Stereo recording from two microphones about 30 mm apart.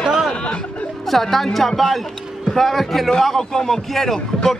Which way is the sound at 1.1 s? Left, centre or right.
Centre.